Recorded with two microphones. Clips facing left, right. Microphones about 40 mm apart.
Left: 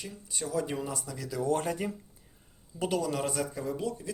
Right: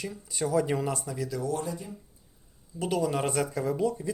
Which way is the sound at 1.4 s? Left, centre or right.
Left.